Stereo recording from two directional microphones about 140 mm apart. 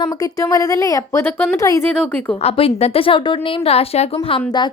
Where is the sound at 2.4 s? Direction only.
50° left (ahead or behind).